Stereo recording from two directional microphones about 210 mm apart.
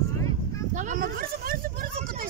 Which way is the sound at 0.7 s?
35° right (ahead or behind).